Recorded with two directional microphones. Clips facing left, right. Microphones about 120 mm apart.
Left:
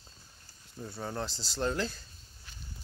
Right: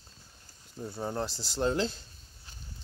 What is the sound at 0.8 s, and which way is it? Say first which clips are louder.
Speech: right 3 dB; 15° right (ahead or behind).